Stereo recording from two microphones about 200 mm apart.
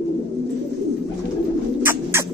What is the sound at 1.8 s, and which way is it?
Bird, 10° right (ahead or behind).